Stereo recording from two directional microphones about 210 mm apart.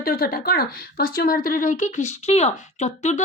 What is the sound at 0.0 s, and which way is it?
Speech, 45° left (ahead or behind).